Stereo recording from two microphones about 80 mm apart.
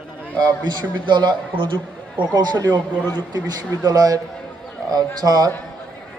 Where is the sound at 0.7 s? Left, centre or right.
Right.